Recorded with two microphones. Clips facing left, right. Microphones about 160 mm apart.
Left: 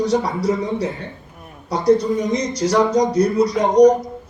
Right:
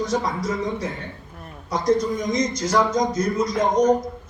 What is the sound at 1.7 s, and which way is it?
A man's voice, 30° left (ahead or behind).